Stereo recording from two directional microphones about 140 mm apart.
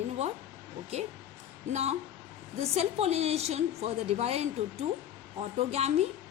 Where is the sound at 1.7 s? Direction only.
50° right (ahead or behind).